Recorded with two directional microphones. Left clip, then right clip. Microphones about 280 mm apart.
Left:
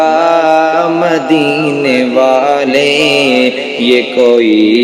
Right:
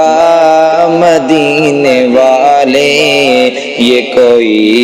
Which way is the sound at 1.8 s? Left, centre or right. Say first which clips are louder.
Right 2 dB; right.